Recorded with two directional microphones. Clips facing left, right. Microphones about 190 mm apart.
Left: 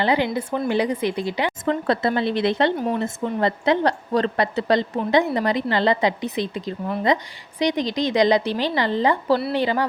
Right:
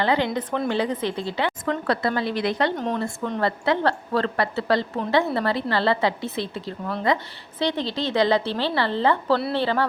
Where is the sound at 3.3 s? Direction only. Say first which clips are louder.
Left 3 dB; 20° left (ahead or behind).